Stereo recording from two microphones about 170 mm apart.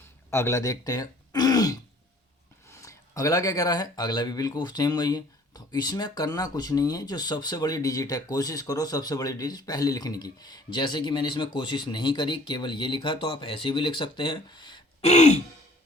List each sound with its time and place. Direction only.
0.3 s speech: 15° left (ahead or behind)
15.0 s throat clearing: 45° left (ahead or behind)